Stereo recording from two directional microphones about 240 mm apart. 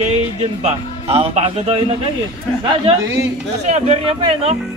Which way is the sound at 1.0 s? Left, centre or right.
Right.